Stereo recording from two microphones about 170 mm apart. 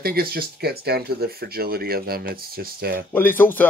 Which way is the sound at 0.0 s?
65° right (ahead or behind).